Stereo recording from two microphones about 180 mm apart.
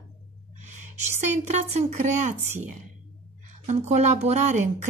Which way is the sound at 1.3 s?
40° right (ahead or behind).